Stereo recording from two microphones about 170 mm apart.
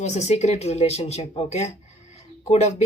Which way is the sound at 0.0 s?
40° left (ahead or behind).